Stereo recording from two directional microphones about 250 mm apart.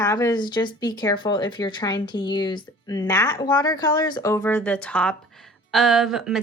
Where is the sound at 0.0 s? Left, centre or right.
Centre.